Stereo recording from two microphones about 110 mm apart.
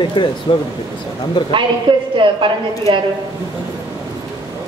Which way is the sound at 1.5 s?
50° right (ahead or behind).